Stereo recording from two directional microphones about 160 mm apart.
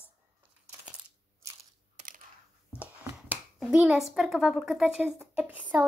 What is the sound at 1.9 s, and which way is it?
Computer keyboard, 55° right (ahead or behind).